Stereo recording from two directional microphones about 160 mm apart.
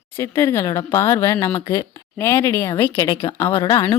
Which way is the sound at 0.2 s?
15° left (ahead or behind).